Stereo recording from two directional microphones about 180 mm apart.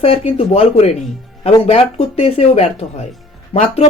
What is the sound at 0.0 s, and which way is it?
Speech, 35° left (ahead or behind).